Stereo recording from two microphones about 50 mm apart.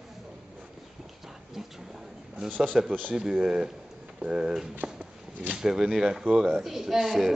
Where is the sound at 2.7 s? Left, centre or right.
Centre.